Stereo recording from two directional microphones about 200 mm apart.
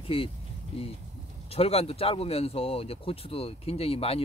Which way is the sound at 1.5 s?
30° left (ahead or behind).